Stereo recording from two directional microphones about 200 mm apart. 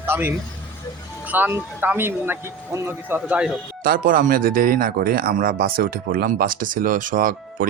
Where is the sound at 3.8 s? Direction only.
45° right (ahead or behind).